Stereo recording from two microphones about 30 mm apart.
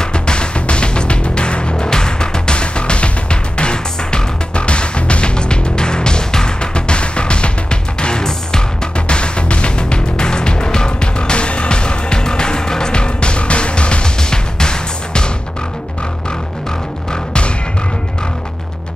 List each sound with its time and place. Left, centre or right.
0.0 s music: left
1.9 s music: left
8.9 s music: left
17.1 s music: left